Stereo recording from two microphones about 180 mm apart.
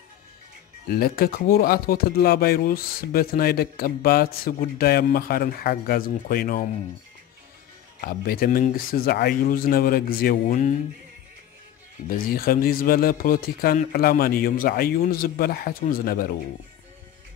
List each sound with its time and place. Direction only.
0.8 s speech: 55° left (ahead or behind)
8.0 s speech: 55° left (ahead or behind)
12.4 s speech: 55° left (ahead or behind)